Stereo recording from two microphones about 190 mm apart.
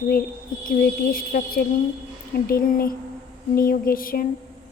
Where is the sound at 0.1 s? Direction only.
50° left (ahead or behind).